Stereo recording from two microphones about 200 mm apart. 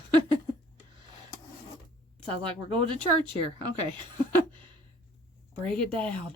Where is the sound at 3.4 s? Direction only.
25° right (ahead or behind).